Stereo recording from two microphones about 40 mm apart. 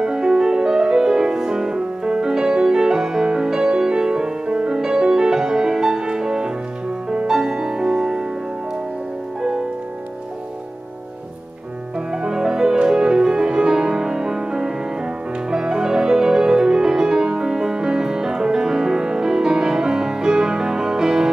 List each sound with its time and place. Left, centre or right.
0.0 s music: centre
12.1 s music: centre